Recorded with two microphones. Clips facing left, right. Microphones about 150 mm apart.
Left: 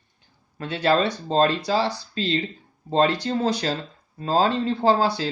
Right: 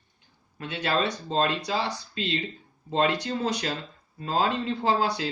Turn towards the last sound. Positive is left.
turn(degrees=30)  # may be behind; listen again after turning